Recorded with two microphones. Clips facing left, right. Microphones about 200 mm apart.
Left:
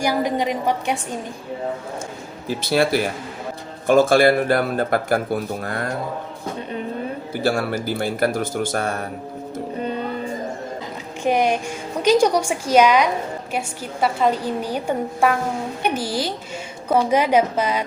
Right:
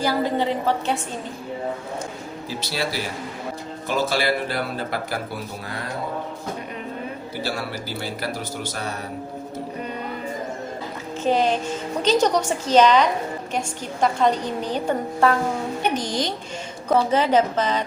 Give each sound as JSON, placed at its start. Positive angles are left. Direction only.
{"t": 0.0, "sound": "a woman's voice", "side_deg": 15}
{"t": 2.5, "sound": "a man's voice", "side_deg": 55}
{"t": 7.4, "sound": "a man's voice", "side_deg": 50}
{"t": 11.2, "sound": "a woman's voice", "side_deg": 15}